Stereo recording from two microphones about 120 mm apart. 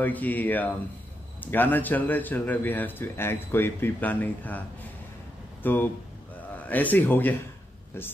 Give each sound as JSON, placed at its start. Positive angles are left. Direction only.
{"t": 0.0, "sound": "a man's voice", "side_deg": 15}